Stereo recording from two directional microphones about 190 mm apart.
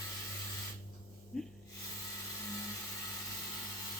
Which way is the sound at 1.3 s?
Centre (ahead or behind).